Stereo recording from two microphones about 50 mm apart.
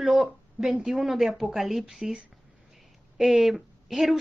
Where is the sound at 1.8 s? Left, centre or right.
Centre.